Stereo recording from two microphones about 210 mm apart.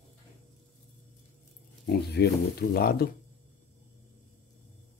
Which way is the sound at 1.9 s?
50° left (ahead or behind).